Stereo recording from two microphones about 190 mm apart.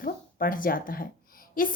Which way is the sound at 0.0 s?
50° left (ahead or behind).